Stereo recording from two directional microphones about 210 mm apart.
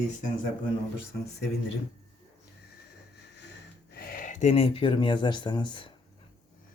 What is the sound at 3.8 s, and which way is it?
Speech, 45° left (ahead or behind).